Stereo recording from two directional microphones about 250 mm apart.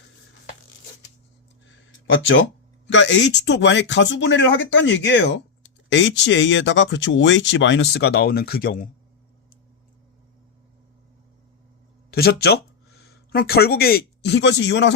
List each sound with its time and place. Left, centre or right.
1.6 s a sound: left
2.8 s speech: left
12.1 s speech: left